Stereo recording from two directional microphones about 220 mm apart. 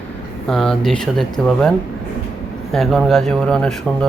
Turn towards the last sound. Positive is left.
turn(degrees=5)  # may be behind; listen again after turning